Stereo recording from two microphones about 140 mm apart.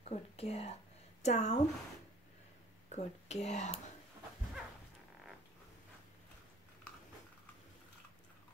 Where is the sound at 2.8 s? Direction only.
55° left (ahead or behind).